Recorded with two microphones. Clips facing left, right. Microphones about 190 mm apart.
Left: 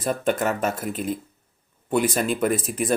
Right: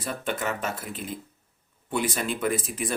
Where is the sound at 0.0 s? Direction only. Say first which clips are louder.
Left 7 dB; 45° left (ahead or behind).